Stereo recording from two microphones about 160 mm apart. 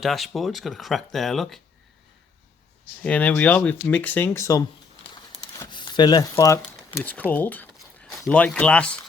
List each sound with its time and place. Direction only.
0.0 s speech: centre (ahead or behind)
3.0 s speech: 10° left (ahead or behind)
5.4 s crumpling: 25° left (ahead or behind)
6.7 s speech: 15° left (ahead or behind)
7.8 s a sound: centre (ahead or behind)